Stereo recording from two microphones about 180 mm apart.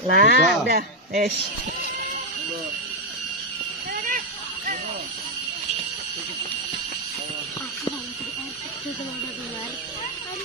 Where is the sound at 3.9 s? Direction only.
50° right (ahead or behind).